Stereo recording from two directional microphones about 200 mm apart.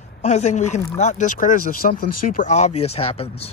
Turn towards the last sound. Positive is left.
turn(degrees=30)  # may be behind; listen again after turning